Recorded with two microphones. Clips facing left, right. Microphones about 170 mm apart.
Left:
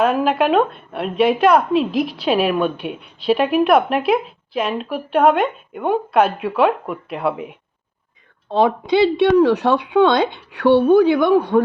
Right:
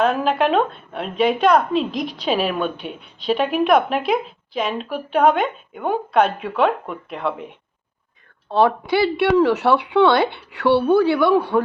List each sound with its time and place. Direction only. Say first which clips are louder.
0.0 s a woman's voice: left 2 dB; 5° left (ahead or behind)
8.4 s speech: left 1 dB; 20° left (ahead or behind)